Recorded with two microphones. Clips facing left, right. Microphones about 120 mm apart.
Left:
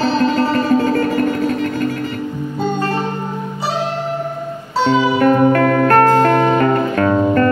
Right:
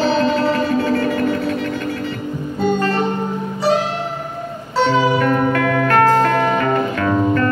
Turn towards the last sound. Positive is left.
turn(degrees=40)  # may be behind; listen again after turning